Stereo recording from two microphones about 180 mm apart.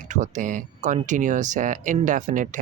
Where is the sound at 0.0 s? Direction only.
45° right (ahead or behind).